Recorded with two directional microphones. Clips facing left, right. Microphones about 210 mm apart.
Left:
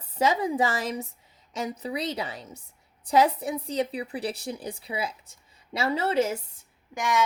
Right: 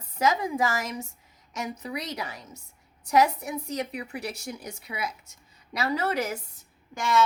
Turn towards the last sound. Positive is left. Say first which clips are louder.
# right 1 dB
turn(degrees=15)  # may be behind; listen again after turning